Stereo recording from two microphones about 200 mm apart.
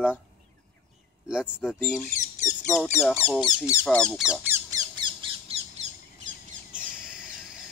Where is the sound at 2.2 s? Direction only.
40° left (ahead or behind).